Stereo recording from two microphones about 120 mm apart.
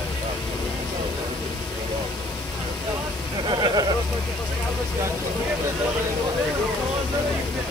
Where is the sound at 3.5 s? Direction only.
35° right (ahead or behind).